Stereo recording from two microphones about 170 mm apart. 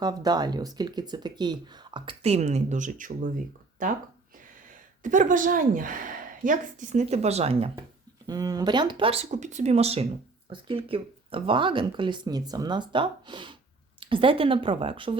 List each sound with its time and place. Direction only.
0.0 s speech: 25° right (ahead or behind); by 3.9 s 50° right (ahead or behind)
5.0 s a woman's voice: 50° right (ahead or behind)
8.3 s speech: 20° right (ahead or behind)